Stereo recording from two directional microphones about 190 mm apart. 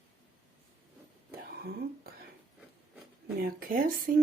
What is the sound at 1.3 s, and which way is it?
Whispering, 55° right (ahead or behind).